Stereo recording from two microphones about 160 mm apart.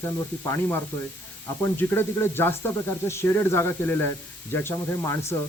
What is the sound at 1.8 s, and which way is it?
Speech, 15° left (ahead or behind).